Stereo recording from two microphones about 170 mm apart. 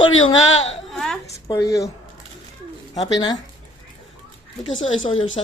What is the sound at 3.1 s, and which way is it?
Speech, 25° left (ahead or behind).